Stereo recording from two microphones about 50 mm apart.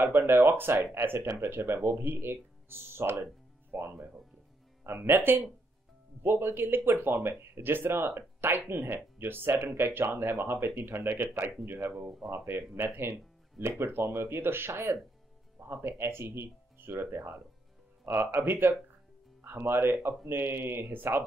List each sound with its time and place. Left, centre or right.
0.0 s speech: right
12.7 s speech: right